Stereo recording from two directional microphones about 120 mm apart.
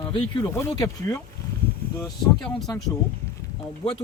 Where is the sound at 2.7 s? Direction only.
30° left (ahead or behind).